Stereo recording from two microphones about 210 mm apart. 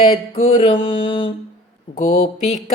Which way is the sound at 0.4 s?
30° left (ahead or behind).